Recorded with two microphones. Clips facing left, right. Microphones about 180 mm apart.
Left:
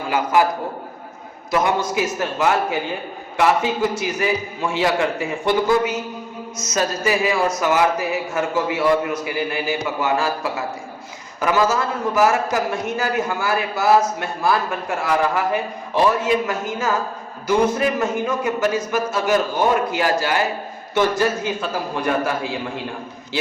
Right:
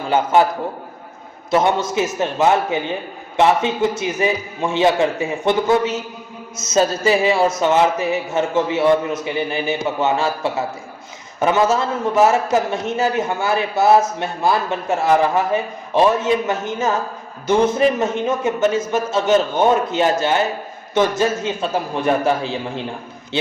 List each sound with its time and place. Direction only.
0.1 s a man's voice: 25° right (ahead or behind)
1.5 s a man's voice: 25° right (ahead or behind)